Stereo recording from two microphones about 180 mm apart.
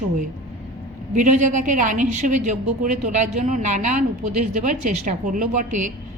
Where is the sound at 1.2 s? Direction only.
45° right (ahead or behind).